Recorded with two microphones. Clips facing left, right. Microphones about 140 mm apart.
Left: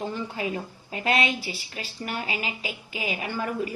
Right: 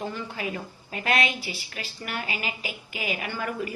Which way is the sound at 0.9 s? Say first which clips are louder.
Left 1 dB; 30° left (ahead or behind).